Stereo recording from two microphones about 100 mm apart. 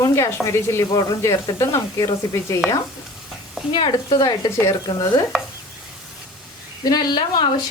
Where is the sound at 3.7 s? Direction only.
60° left (ahead or behind).